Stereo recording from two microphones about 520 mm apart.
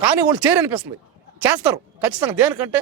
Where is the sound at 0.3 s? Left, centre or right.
Centre.